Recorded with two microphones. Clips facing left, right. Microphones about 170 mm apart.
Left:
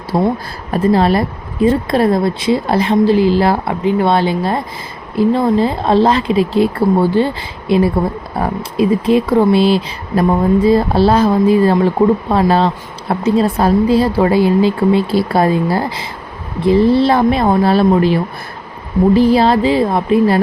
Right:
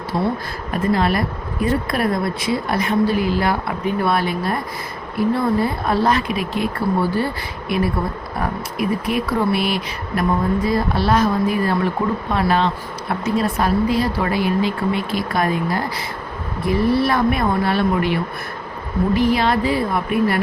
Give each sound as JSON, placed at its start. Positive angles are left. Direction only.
{"t": 0.1, "sound": "speech", "side_deg": 45}
{"t": 0.7, "sound": "a woman's voice", "side_deg": 30}